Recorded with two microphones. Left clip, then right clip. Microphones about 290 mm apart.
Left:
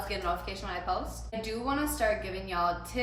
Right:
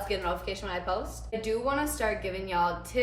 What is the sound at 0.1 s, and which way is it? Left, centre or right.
A woman's voice, centre.